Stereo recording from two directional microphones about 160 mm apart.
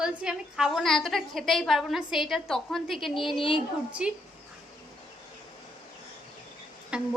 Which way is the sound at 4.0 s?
5° right (ahead or behind).